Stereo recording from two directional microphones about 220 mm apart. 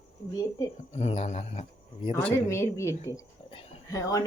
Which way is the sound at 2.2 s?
10° left (ahead or behind).